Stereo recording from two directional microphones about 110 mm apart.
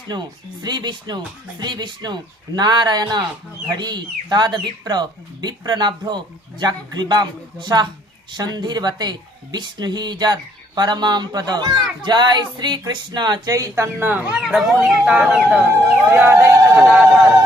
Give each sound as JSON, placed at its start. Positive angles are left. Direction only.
{"t": 0.1, "sound": "speech", "side_deg": -40}
{"t": 14.1, "sound": "speech", "side_deg": -10}
{"t": 16.7, "sound": "a sound", "side_deg": -5}